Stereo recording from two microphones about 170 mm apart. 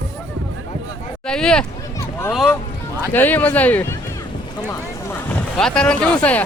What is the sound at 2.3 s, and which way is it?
Boat, centre (ahead or behind).